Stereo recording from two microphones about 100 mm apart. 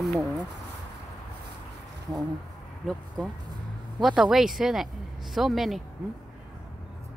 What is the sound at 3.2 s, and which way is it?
Speech, centre (ahead or behind).